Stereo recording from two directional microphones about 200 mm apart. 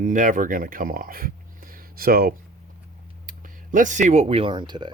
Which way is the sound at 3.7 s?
40° right (ahead or behind).